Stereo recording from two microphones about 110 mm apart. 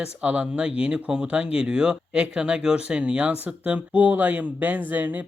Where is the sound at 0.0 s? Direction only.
10° right (ahead or behind).